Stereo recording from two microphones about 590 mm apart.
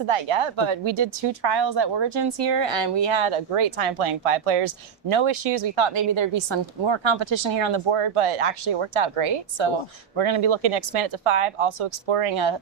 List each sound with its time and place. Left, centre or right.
0.1 s speech: right
10.2 s speech: right